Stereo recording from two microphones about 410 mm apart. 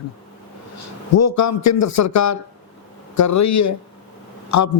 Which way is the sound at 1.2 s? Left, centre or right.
Left.